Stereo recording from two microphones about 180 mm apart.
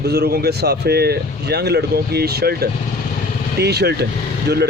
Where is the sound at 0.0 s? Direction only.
65° right (ahead or behind).